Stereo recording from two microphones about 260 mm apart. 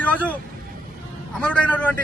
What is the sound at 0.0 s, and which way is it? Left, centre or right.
Vehicle, centre.